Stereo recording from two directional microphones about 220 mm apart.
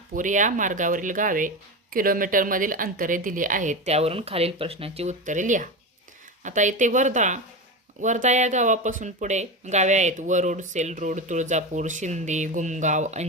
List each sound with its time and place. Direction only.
0.1 s speech: 35° right (ahead or behind)